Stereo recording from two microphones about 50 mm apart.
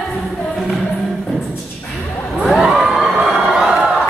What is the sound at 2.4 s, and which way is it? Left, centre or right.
Crowd, centre.